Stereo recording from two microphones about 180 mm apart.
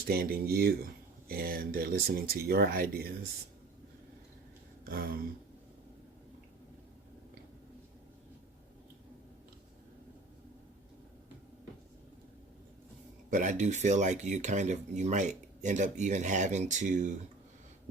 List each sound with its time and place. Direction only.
0.0 s speech: 55° right (ahead or behind)
4.9 s speech: 55° right (ahead or behind)
13.3 s speech: 45° right (ahead or behind)